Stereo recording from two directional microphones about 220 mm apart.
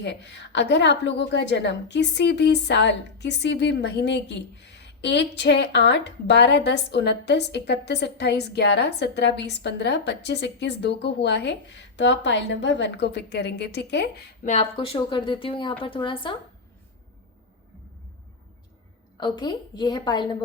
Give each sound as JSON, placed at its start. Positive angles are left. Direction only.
{"t": 0.0, "sound": "a woman's voice", "side_deg": 55}
{"t": 14.4, "sound": "speech", "side_deg": 25}
{"t": 19.1, "sound": "speech", "side_deg": 20}